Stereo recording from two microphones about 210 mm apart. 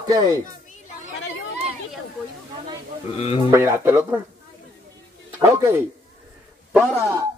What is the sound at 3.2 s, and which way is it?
Speech, 25° left (ahead or behind).